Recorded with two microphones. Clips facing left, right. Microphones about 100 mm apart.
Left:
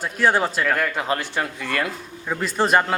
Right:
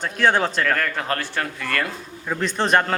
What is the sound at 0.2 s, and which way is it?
Speech, 5° left (ahead or behind).